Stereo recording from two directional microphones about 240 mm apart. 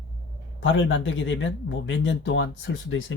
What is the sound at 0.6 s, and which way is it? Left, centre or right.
Speech, left.